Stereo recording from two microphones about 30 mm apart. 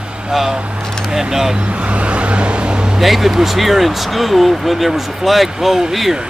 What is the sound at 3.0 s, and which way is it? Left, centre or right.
Speech, centre.